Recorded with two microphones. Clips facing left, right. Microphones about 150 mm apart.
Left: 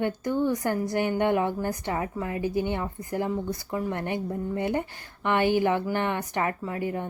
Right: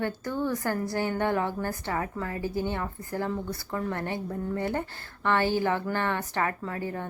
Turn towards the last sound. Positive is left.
turn(degrees=15)  # may be behind; listen again after turning